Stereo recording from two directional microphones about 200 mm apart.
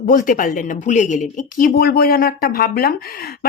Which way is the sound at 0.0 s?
40° left (ahead or behind).